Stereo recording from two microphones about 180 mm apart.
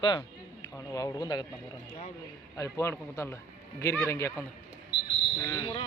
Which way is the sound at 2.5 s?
15° left (ahead or behind).